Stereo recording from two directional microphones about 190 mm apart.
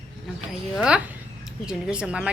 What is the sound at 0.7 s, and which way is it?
A woman's voice, 5° right (ahead or behind).